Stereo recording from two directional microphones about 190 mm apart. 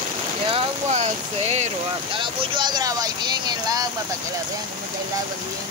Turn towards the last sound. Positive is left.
turn(degrees=-20)  # may be behind; listen again after turning